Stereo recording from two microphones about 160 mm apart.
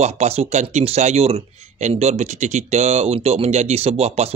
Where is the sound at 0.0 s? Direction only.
45° right (ahead or behind).